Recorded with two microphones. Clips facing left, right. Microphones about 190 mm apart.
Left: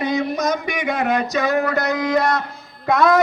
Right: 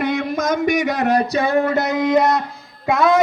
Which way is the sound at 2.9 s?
5° right (ahead or behind).